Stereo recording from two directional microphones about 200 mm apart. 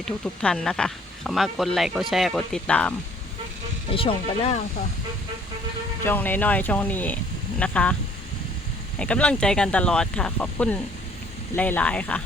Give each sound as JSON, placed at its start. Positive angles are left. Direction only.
{"t": 0.0, "sound": "speech", "side_deg": 5}
{"t": 3.9, "sound": "speech", "side_deg": 30}
{"t": 6.1, "sound": "speech", "side_deg": 10}
{"t": 9.0, "sound": "speech", "side_deg": 5}